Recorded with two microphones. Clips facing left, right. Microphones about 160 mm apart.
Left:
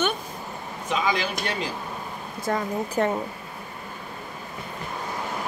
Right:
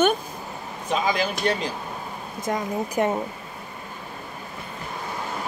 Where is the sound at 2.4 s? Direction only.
20° right (ahead or behind).